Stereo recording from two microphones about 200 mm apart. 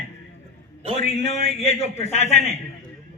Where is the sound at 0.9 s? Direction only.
30° left (ahead or behind).